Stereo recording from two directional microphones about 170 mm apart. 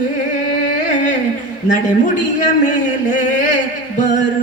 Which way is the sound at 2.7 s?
45° left (ahead or behind).